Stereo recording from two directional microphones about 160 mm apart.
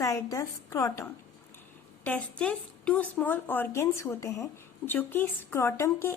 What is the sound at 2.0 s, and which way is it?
A woman's voice, 10° left (ahead or behind).